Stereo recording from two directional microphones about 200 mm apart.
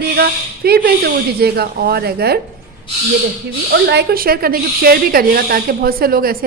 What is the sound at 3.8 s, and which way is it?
Speech, 50° right (ahead or behind).